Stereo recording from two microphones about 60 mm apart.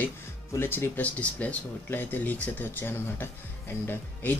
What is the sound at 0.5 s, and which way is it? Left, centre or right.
Speech, left.